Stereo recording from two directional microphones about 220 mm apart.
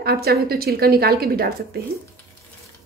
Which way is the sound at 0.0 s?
45° right (ahead or behind).